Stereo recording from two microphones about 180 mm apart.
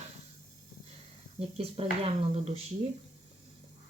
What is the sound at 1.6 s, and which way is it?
Speech, 35° right (ahead or behind).